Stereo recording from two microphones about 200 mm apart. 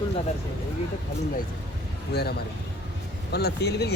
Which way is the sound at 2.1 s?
55° left (ahead or behind).